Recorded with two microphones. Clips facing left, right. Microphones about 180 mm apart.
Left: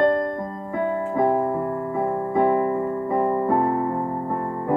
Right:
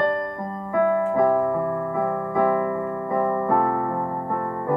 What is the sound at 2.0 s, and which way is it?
Electric piano, 25° left (ahead or behind).